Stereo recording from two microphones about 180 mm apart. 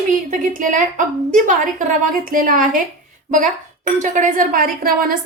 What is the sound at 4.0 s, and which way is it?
A woman's voice, 45° right (ahead or behind).